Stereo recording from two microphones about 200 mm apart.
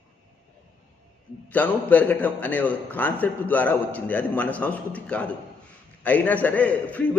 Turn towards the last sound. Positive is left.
turn(degrees=5)  # may be behind; listen again after turning